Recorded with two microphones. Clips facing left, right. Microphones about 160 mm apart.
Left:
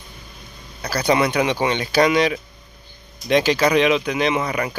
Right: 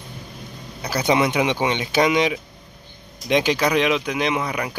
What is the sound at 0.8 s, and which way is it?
Speech, 20° right (ahead or behind).